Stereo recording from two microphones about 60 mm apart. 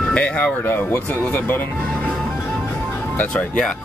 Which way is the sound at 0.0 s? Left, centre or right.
Left.